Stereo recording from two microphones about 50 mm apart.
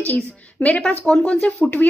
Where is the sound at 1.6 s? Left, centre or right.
Left.